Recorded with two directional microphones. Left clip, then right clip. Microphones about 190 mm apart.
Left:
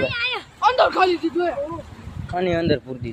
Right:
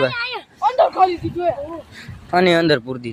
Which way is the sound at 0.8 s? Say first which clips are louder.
Right 5 dB; 65° left (ahead or behind).